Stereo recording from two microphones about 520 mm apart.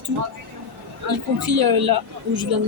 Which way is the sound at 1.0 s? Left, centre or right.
Right.